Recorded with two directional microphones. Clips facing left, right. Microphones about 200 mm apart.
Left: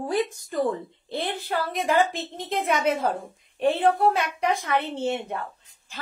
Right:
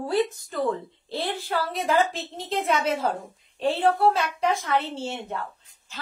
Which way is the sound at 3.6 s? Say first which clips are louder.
Left 1 dB; 15° left (ahead or behind).